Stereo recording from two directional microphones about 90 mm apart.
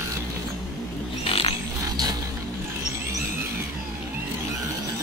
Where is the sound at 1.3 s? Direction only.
90° left.